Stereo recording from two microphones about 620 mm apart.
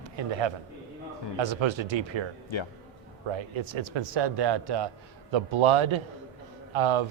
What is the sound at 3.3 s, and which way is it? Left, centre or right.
Speech, right.